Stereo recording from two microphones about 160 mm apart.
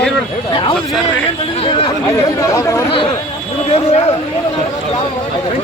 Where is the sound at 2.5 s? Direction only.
20° left (ahead or behind).